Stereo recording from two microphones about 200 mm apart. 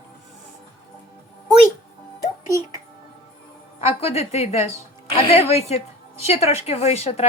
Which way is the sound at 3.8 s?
30° left (ahead or behind).